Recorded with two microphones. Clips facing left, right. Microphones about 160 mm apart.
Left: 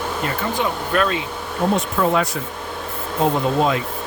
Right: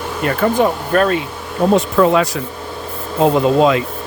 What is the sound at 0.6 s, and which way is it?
Speech, 45° right (ahead or behind).